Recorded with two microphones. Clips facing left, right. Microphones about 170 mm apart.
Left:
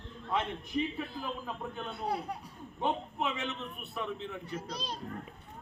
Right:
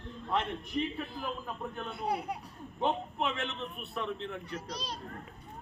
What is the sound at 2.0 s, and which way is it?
Speech, 15° right (ahead or behind).